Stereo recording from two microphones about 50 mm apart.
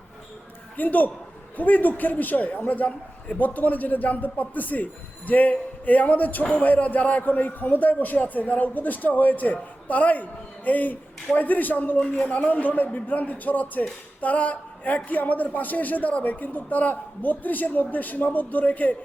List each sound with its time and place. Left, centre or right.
0.8 s a man's voice: left